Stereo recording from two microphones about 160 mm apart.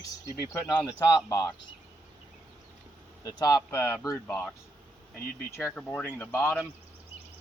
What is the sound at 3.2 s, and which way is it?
Speech, 25° left (ahead or behind).